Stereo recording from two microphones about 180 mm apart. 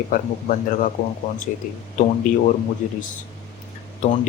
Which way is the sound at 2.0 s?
40° left (ahead or behind).